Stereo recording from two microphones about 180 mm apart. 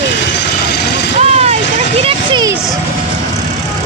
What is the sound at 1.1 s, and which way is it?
Vehicle, 35° right (ahead or behind).